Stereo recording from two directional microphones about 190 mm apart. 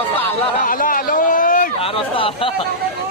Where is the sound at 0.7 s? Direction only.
45° left (ahead or behind).